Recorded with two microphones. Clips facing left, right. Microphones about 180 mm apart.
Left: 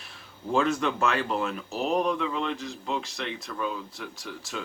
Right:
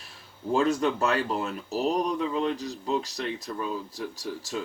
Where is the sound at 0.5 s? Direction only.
35° right (ahead or behind).